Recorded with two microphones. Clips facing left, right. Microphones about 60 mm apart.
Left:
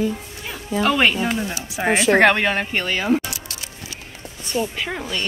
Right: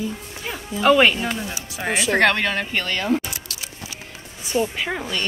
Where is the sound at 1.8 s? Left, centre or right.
Left.